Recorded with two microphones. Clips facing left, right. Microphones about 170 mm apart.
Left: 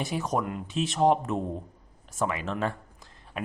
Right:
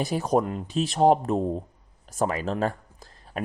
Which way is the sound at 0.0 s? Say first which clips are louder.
Right 5 dB; 35° right (ahead or behind).